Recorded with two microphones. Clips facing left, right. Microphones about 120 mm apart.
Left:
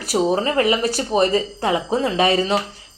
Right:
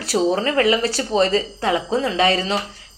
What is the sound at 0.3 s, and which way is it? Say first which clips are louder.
Speech: even; 25° left (ahead or behind).